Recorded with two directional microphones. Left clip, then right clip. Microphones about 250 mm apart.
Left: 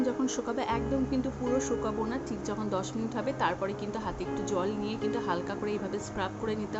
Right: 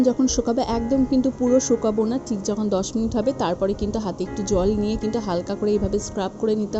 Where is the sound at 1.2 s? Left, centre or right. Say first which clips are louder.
Right 11 dB; centre.